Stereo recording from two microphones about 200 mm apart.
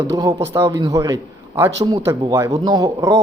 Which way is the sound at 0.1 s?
20° right (ahead or behind).